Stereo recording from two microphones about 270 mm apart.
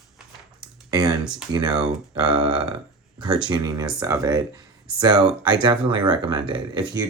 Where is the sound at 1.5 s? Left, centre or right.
Centre.